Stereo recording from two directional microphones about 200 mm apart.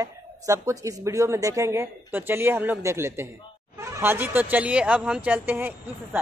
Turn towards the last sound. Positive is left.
turn(degrees=-10)  # may be behind; listen again after turning